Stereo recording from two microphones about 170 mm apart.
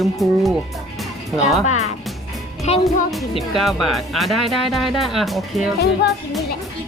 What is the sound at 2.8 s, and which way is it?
Speech, centre (ahead or behind).